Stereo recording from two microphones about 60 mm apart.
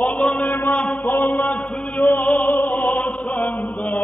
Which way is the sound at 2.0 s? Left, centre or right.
Left.